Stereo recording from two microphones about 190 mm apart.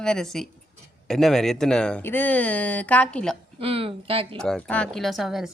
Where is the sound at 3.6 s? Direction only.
30° right (ahead or behind).